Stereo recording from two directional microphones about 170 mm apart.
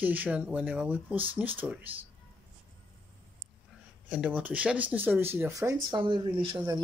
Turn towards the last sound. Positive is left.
turn(degrees=-30)  # may be behind; listen again after turning